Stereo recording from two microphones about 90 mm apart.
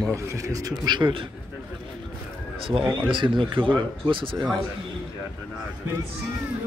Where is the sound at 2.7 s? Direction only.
75° right (ahead or behind).